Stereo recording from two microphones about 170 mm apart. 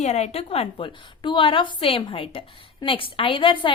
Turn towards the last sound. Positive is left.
turn(degrees=30)  # may be behind; listen again after turning